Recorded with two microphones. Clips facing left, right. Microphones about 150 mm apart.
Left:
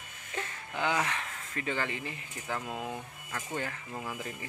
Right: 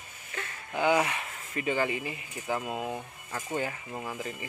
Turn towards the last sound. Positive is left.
turn(degrees=-5)  # may be behind; listen again after turning